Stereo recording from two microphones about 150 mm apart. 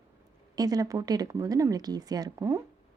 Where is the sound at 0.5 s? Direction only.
25° right (ahead or behind).